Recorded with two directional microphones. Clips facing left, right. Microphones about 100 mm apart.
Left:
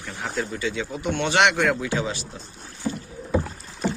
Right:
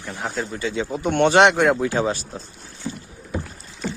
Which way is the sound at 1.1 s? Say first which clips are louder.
Right 8 dB; 50° right (ahead or behind).